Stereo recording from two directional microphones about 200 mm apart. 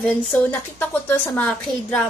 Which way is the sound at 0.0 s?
10° left (ahead or behind).